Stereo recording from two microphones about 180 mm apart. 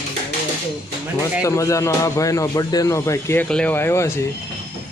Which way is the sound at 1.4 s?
15° left (ahead or behind).